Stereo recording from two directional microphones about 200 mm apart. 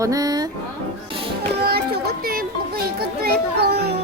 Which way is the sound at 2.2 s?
50° right (ahead or behind).